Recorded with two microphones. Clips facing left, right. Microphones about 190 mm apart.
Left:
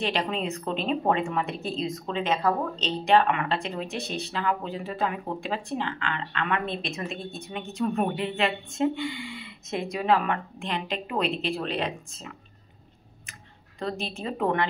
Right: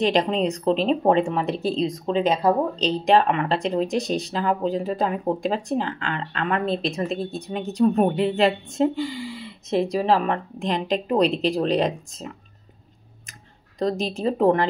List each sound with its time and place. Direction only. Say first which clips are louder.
0.0 s a woman's voice: right 8 dB; 40° right (ahead or behind)
13.7 s a woman's voice: right 8 dB; 40° right (ahead or behind)